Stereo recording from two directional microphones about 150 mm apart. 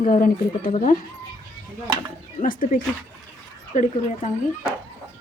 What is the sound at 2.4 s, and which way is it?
Speech, 65° left (ahead or behind).